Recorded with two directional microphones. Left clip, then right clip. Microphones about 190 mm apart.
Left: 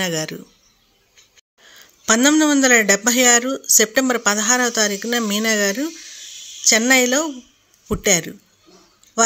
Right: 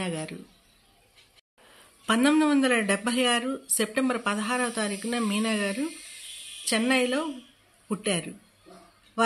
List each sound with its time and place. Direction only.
0.0 s speech: 40° left (ahead or behind)
2.0 s speech: 30° left (ahead or behind)